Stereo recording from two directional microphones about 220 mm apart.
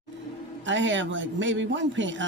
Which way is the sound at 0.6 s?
55° right (ahead or behind).